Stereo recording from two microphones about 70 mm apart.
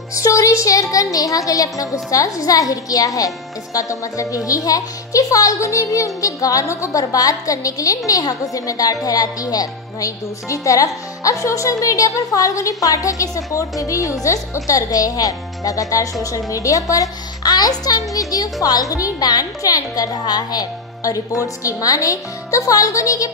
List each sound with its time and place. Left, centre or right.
0.1 s a woman's voice: left